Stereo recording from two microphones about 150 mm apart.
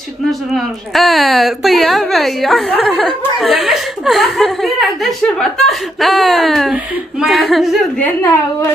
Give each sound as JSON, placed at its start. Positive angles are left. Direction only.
{"t": 0.3, "sound": "speech", "side_deg": 0}
{"t": 8.0, "sound": "a woman's voice", "side_deg": 15}